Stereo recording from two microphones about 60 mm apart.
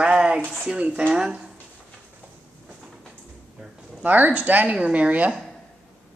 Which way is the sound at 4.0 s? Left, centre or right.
Right.